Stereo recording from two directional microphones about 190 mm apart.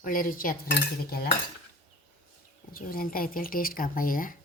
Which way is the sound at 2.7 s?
50° left (ahead or behind).